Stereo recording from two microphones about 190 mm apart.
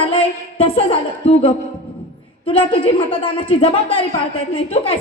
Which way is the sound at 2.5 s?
30° left (ahead or behind).